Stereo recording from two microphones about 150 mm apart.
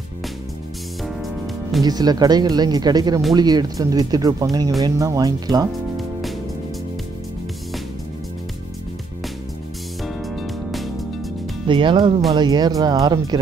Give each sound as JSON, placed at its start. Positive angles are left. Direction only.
{"t": 1.8, "sound": "speech", "side_deg": -25}
{"t": 10.0, "sound": "music", "side_deg": 0}
{"t": 11.6, "sound": "speech", "side_deg": -35}